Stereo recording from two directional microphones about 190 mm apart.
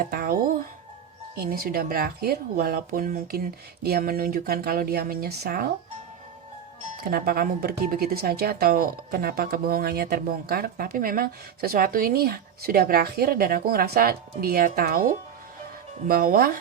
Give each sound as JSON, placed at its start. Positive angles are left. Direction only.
{"t": 0.0, "sound": "a sound", "side_deg": -50}
{"t": 1.4, "sound": "speech", "side_deg": -50}
{"t": 7.0, "sound": "speech", "side_deg": -50}
{"t": 16.0, "sound": "speech", "side_deg": -50}